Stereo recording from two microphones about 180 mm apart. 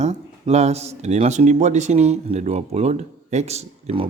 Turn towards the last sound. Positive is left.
turn(degrees=-35)  # may be behind; listen again after turning